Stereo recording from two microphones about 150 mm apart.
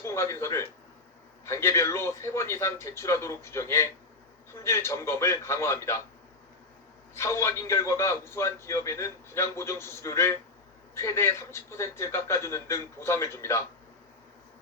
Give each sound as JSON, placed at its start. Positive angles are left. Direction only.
{"t": 0.0, "sound": "speech", "side_deg": 15}
{"t": 7.1, "sound": "a man's voice", "side_deg": 20}